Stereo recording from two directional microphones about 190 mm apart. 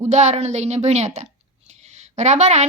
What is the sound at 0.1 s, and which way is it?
A child's voice, 35° right (ahead or behind).